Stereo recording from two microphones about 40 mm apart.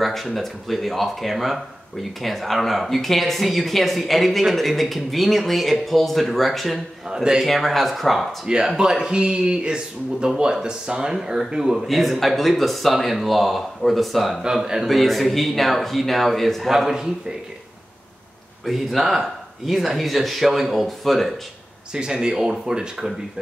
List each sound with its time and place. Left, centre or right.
0.0 s speech: centre
8.6 s speech: centre
11.8 s speech: centre
14.4 s speech: centre
14.9 s speech: centre
18.7 s speech: centre
21.9 s speech: centre